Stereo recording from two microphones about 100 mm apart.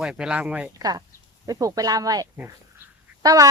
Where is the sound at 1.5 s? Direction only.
35° right (ahead or behind).